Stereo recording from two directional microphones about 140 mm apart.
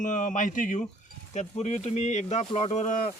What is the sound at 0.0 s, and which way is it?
Speech, 65° left (ahead or behind).